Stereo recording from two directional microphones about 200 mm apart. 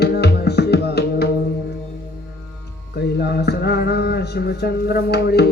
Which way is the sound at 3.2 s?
55° left (ahead or behind).